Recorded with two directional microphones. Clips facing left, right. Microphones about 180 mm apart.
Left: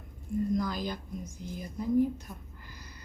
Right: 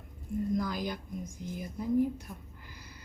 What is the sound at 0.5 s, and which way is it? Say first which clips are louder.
Speech: left 1 dB; 10° right (ahead or behind).